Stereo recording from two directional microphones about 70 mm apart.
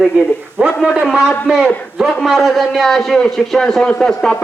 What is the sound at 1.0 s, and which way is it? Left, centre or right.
A man's voice, centre.